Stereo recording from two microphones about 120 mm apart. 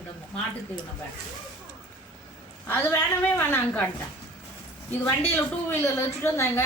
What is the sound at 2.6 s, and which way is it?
A woman's voice, 15° left (ahead or behind).